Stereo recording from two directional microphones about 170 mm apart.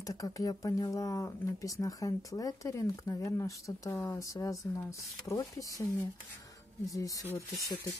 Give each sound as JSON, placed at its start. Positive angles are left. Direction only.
{"t": 0.0, "sound": "speech", "side_deg": 20}
{"t": 6.9, "sound": "speech", "side_deg": 20}